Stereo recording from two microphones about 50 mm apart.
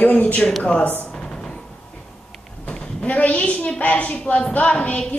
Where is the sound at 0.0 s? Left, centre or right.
Left.